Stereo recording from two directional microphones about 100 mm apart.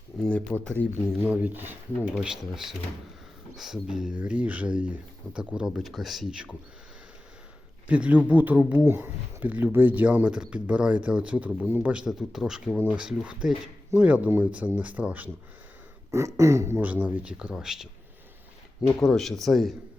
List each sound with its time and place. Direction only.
0.2 s speech: 15° left (ahead or behind)
1.2 s speech: 15° right (ahead or behind)
2.1 s speech: 5° right (ahead or behind)
7.9 s speech: 10° right (ahead or behind)
16.1 s speech: 30° right (ahead or behind); by 19.7 s centre (ahead or behind)